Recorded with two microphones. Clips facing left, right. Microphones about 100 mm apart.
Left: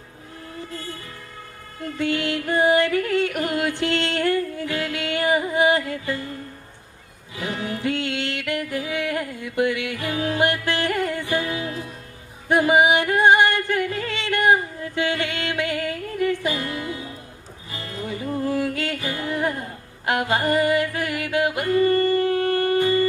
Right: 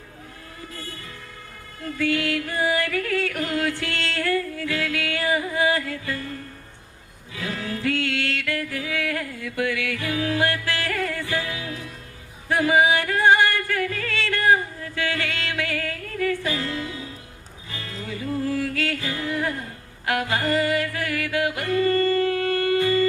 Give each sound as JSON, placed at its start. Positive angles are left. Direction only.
{"t": 2.0, "sound": "music", "side_deg": 25}